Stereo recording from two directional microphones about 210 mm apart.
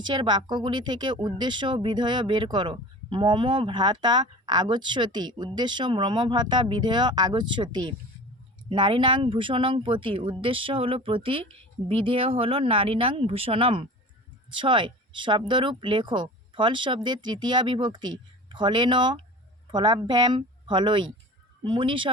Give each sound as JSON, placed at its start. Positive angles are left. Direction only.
{"t": 0.1, "sound": "speech", "side_deg": -20}